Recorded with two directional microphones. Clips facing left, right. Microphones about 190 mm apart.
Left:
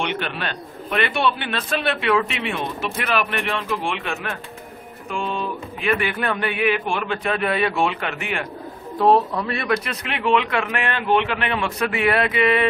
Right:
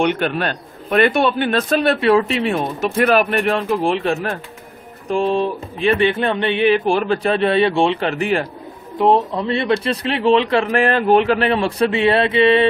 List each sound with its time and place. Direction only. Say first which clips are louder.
0.0 s a man's voice: right 8 dB; 45° right (ahead or behind)
5.0 s a sound: right 9 dB; 35° right (ahead or behind)
8.9 s speech: right 2 dB; 20° right (ahead or behind)